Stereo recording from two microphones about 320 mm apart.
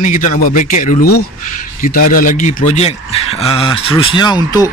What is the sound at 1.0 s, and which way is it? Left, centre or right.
Speech, left.